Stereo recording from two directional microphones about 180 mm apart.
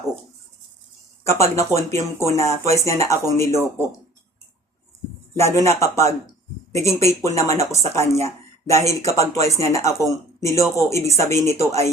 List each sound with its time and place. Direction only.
1.2 s speech: 15° left (ahead or behind)
5.4 s speech: 15° left (ahead or behind)